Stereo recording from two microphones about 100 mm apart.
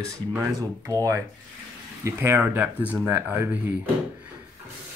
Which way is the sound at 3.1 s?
25° right (ahead or behind).